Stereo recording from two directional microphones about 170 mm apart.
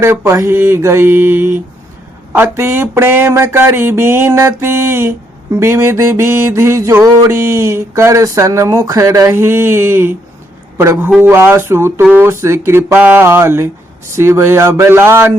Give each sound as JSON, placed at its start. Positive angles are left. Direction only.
{"t": 0.0, "sound": "mantra", "side_deg": -15}